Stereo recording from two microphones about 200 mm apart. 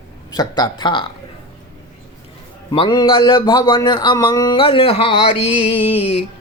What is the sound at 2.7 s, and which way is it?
A man's voice, 25° left (ahead or behind).